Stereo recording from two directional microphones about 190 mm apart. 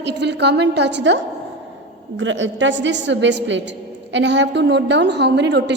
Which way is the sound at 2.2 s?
80° right.